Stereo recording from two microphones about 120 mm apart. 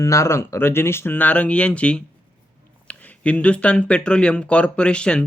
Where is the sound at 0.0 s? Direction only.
25° left (ahead or behind).